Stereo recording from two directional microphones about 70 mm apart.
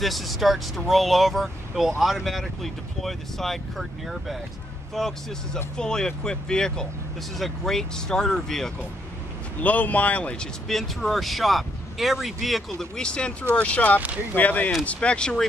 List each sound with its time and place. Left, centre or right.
0.0 s speech: centre
9.6 s speech: left
10.7 s speech: centre
12.7 s speech: centre